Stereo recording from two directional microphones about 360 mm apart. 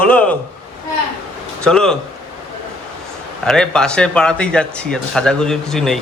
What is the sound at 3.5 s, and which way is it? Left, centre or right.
Speech, centre.